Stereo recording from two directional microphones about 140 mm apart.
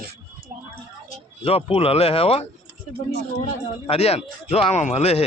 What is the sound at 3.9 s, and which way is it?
Speech, 45° left (ahead or behind).